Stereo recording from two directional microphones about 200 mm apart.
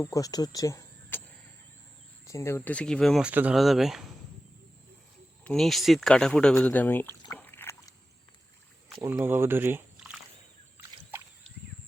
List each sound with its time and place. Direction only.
0.0 s speech: 15° left (ahead or behind)
2.2 s speech: 15° left (ahead or behind); by 4.0 s centre (ahead or behind)
5.5 s speech: centre (ahead or behind)
7.3 s a sound: 10° left (ahead or behind)
9.0 s speech: 10° right (ahead or behind)